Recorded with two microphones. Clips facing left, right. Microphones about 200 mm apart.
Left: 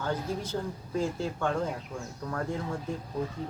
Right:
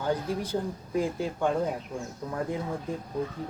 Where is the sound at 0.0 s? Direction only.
15° right (ahead or behind).